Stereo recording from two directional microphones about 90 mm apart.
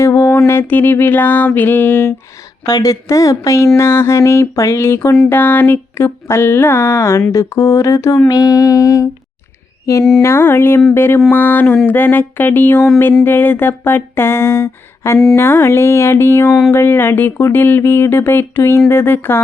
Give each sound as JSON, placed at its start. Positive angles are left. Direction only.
{"t": 0.2, "sound": "a sound", "side_deg": 30}
{"t": 2.6, "sound": "speech", "side_deg": 40}
{"t": 10.2, "sound": "speech", "side_deg": 30}